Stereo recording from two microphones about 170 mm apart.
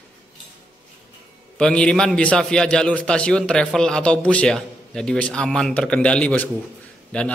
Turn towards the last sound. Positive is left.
turn(degrees=5)  # may be behind; listen again after turning